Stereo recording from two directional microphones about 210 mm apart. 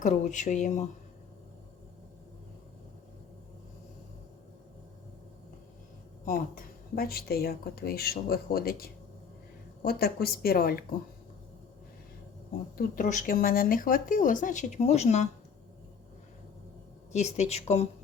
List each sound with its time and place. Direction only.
0.0 s speech: 35° left (ahead or behind)
6.2 s speech: 40° left (ahead or behind)
12.7 s speech: 35° left (ahead or behind)
17.1 s speech: 35° left (ahead or behind)